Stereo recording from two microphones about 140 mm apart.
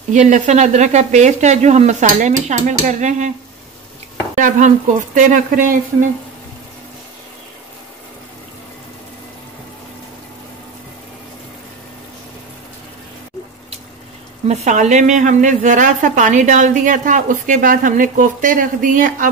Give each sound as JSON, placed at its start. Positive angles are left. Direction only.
{"t": 0.1, "sound": "a woman's voice", "side_deg": -60}
{"t": 4.4, "sound": "a woman's voice", "side_deg": -60}
{"t": 14.5, "sound": "a woman's voice", "side_deg": -55}